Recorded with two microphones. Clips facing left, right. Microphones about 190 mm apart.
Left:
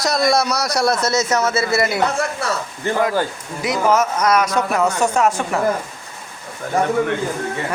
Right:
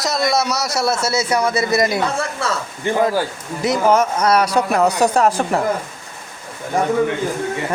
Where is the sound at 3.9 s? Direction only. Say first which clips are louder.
Right 1 dB; 30° right (ahead or behind).